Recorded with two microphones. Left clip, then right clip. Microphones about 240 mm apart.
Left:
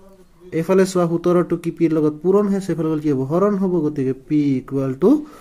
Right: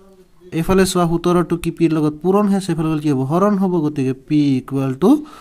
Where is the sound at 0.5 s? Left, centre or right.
Right.